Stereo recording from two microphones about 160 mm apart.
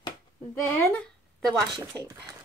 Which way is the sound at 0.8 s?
10° left (ahead or behind).